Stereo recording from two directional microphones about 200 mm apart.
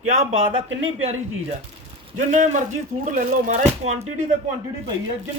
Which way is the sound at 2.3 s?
40° right (ahead or behind).